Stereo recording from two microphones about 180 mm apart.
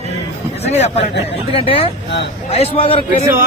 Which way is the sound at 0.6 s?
35° left (ahead or behind).